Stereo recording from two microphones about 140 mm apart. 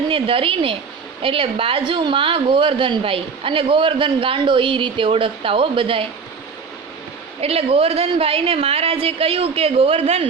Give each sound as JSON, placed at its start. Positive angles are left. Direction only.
{"t": 0.1, "sound": "a woman's voice", "side_deg": -40}
{"t": 7.4, "sound": "a woman's voice", "side_deg": -45}